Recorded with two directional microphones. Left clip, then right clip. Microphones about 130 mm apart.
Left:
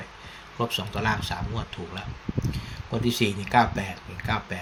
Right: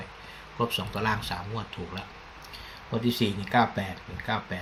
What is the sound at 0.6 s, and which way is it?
Speech, 15° left (ahead or behind).